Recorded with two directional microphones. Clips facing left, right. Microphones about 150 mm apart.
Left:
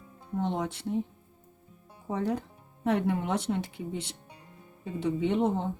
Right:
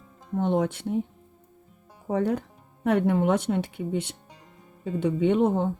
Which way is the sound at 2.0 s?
60° right (ahead or behind).